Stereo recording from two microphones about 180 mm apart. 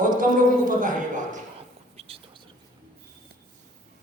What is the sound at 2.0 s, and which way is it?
Whispering, 30° right (ahead or behind).